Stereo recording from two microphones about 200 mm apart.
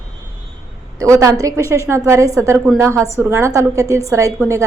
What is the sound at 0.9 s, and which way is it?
A woman's voice, 15° right (ahead or behind).